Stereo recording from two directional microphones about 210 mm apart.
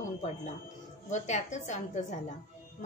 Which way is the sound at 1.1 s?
35° left (ahead or behind).